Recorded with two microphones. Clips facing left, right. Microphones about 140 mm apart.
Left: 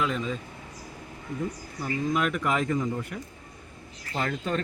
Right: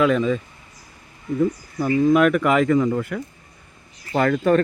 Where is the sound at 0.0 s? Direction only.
70° right (ahead or behind).